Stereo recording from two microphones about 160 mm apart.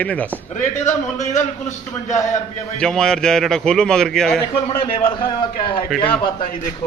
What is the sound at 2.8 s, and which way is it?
A man's voice, 5° left (ahead or behind).